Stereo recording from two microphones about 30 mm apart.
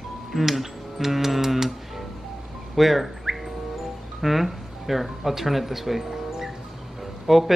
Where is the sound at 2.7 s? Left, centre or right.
Centre.